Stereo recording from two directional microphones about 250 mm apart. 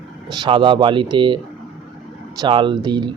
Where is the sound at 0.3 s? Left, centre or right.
Centre.